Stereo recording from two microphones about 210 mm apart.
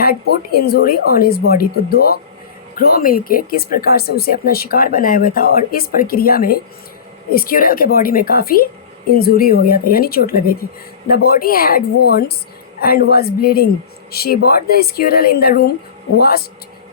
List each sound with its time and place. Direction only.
0.0 s speech: 45° left (ahead or behind)
12.8 s speech: 45° left (ahead or behind)